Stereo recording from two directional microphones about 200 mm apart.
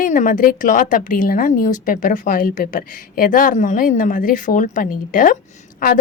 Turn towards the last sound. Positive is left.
turn(degrees=45)  # may be behind; listen again after turning